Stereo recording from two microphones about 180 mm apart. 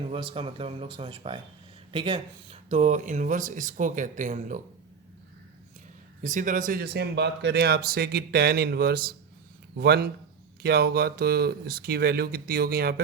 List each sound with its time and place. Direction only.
0.1 s speech: 30° right (ahead or behind)
6.2 s speech: 45° right (ahead or behind)